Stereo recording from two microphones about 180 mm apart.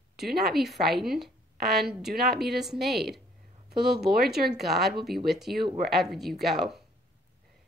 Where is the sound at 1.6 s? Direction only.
60° right (ahead or behind).